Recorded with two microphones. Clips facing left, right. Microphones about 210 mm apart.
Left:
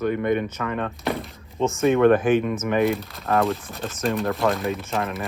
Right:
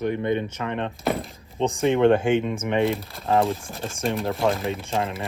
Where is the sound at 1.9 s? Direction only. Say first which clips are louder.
Left 2 dB; 30° right (ahead or behind).